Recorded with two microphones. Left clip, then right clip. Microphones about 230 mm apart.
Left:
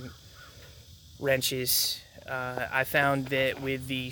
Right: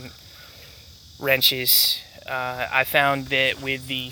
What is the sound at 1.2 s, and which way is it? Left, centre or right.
Speech, centre.